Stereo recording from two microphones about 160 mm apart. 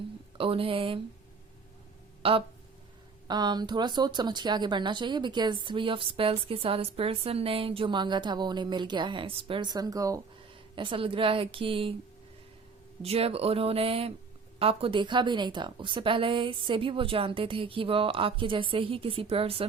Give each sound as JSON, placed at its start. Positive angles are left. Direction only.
{"t": 0.3, "sound": "a woman's voice", "side_deg": -35}
{"t": 2.2, "sound": "a woman's voice", "side_deg": -35}
{"t": 10.8, "sound": "a woman's voice", "side_deg": -35}
{"t": 13.0, "sound": "a woman's voice", "side_deg": -40}